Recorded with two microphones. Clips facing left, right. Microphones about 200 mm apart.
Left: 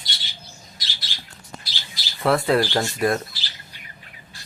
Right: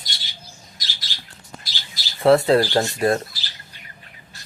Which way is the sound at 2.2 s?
25° right (ahead or behind).